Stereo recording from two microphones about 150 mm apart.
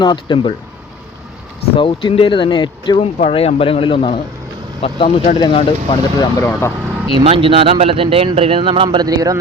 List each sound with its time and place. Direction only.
0.0 s speech: 30° left (ahead or behind)
1.7 s speech: 35° left (ahead or behind)
3.0 s speech: 40° left (ahead or behind)
6.4 s speech: 15° left (ahead or behind)
7.3 s speech: 40° right (ahead or behind)